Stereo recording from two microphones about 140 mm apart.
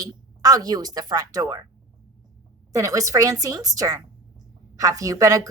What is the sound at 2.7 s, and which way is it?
Speech, 25° right (ahead or behind).